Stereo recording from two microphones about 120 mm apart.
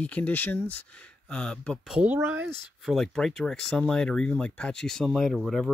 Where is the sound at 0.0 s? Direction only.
10° left (ahead or behind).